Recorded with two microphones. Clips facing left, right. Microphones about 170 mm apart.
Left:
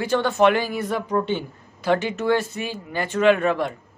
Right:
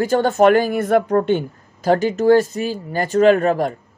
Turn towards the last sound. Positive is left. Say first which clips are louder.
# right 4 dB
turn(degrees=-40)  # may be behind; listen again after turning